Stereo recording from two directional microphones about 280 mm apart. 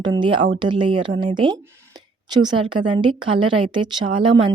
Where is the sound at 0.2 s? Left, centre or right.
Centre.